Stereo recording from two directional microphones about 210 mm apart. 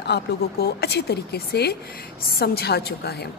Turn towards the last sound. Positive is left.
turn(degrees=50)  # may be behind; listen again after turning